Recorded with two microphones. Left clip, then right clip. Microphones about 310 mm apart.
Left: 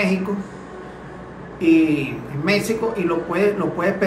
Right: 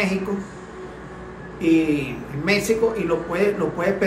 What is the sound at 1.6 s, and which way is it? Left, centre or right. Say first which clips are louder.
A man's voice: left 3 dB; centre.